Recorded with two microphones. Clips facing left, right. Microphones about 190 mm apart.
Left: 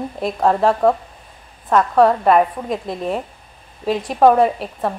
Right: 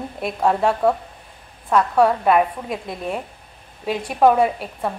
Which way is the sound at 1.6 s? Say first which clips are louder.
Left 3 dB; centre (ahead or behind).